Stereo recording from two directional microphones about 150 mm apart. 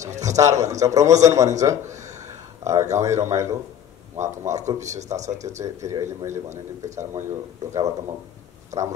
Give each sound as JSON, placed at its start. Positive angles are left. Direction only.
{"t": 0.6, "sound": "speech", "side_deg": -20}
{"t": 4.9, "sound": "speech", "side_deg": -50}
{"t": 5.6, "sound": "speech", "side_deg": -20}